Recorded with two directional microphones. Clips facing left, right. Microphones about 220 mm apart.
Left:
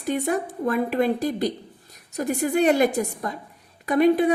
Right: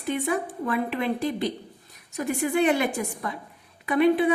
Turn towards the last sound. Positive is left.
turn(degrees=40)  # may be behind; listen again after turning